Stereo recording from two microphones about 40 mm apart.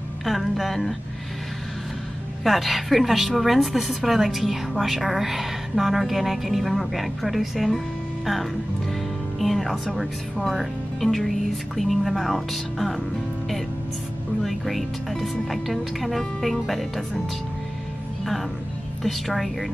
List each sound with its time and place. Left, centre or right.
0.2 s a sound: centre
2.4 s a woman's voice: centre
9.4 s a woman's voice: centre
14.4 s a woman's voice: centre
19.0 s a woman's voice: centre